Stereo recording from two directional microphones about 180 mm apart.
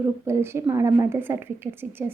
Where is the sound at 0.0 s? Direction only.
15° right (ahead or behind).